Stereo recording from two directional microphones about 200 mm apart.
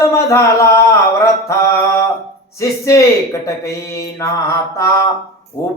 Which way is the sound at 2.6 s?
15° left (ahead or behind).